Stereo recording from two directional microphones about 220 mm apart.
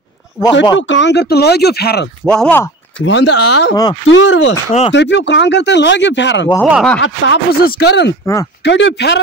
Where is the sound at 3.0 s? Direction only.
50° left (ahead or behind).